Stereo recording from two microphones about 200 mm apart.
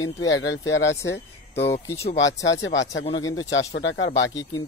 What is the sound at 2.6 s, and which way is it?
Speech, 65° left (ahead or behind).